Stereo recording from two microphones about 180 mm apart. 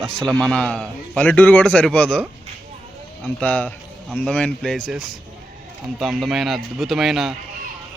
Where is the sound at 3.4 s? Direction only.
10° left (ahead or behind).